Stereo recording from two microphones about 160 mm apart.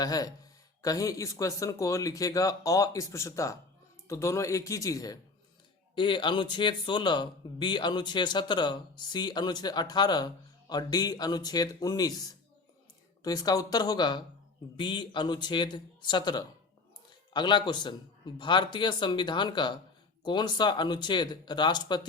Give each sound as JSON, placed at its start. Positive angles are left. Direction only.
{"t": 0.0, "sound": "speech", "side_deg": 25}